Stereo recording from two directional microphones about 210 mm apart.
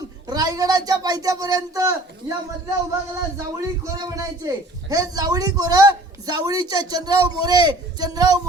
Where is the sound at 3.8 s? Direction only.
15° right (ahead or behind).